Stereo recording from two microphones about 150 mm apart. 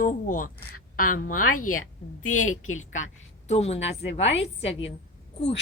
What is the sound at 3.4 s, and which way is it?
A woman's voice, 45° left (ahead or behind).